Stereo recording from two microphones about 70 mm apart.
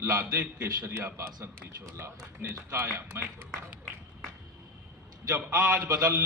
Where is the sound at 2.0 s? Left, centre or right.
Right.